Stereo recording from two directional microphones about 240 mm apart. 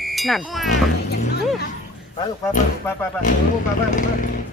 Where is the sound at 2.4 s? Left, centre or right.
Centre.